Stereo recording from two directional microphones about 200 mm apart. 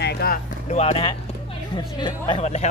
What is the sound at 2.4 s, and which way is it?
Speech, 35° left (ahead or behind).